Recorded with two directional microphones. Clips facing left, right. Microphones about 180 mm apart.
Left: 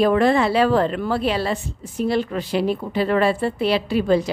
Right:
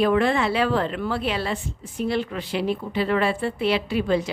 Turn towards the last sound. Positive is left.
turn(degrees=40)  # may be behind; listen again after turning